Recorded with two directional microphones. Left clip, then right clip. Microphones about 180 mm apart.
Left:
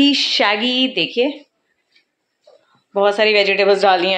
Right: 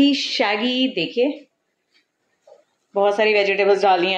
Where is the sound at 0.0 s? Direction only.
5° left (ahead or behind).